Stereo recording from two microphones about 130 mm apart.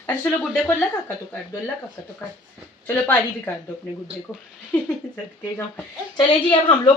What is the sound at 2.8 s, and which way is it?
Speech, 15° left (ahead or behind).